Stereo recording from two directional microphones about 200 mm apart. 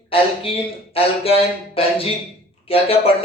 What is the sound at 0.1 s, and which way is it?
Speech, 30° left (ahead or behind).